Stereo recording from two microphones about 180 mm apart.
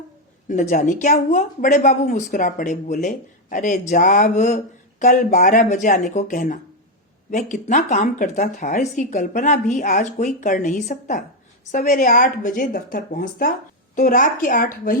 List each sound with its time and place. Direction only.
0.4 s a woman's voice: 45° left (ahead or behind)